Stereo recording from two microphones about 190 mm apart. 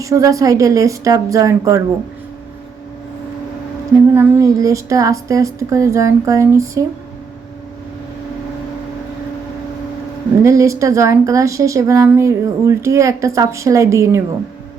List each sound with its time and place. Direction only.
0.0 s speech: 15° right (ahead or behind)
4.1 s speech: 15° right (ahead or behind)
10.4 s speech: 15° right (ahead or behind)